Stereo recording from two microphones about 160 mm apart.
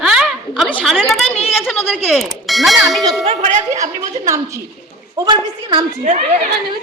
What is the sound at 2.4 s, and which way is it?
Ding, centre (ahead or behind).